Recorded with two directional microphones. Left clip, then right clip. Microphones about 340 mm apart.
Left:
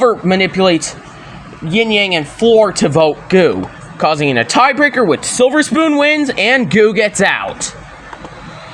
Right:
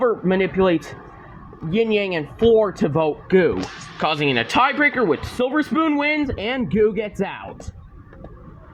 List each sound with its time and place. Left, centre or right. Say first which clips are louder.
0.0 s speech: left 7 dB; right